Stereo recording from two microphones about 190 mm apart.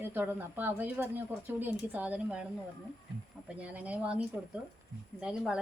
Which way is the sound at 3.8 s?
5° right (ahead or behind).